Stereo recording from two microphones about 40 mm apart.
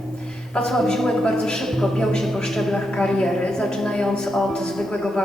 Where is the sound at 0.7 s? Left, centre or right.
Centre.